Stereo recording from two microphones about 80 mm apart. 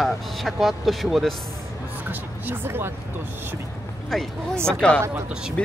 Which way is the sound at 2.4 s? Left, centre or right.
Right.